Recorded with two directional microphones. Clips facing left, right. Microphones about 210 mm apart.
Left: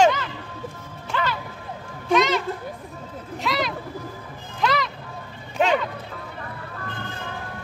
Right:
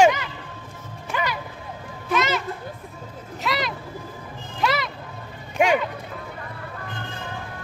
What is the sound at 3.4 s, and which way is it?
Vehicle, centre (ahead or behind).